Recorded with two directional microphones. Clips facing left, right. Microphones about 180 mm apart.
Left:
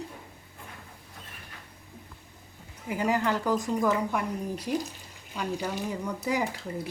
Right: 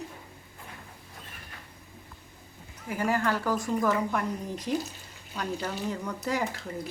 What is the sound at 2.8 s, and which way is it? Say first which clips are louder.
Speech: left 1 dB; 15° left (ahead or behind).